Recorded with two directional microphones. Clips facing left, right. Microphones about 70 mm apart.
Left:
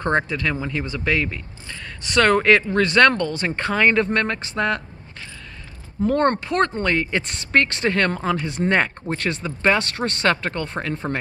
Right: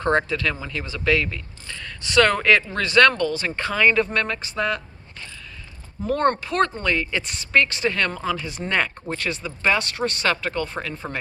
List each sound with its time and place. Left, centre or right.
0.0 s speech: left
6.1 s speech: left
6.7 s speech: left
8.5 s speech: left